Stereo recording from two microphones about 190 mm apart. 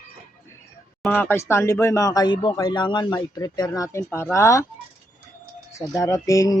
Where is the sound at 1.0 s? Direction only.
10° left (ahead or behind).